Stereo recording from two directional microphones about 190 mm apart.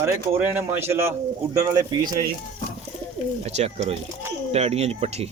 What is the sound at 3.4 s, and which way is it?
Speech, 35° right (ahead or behind).